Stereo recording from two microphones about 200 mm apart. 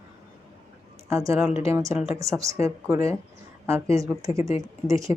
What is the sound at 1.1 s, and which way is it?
Speech, 15° right (ahead or behind).